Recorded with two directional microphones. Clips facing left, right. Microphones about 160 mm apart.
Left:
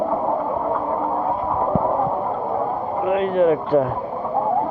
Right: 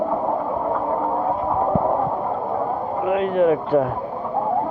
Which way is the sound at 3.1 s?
5° right (ahead or behind).